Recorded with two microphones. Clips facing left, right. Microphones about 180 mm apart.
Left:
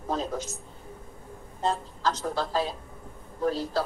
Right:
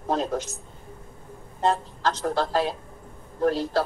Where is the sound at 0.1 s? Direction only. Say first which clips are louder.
Right 5 dB; 70° right (ahead or behind).